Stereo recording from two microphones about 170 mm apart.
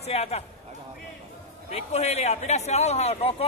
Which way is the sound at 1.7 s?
40° left (ahead or behind).